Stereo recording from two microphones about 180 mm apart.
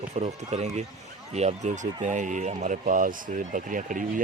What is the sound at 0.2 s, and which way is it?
Speech, 40° right (ahead or behind).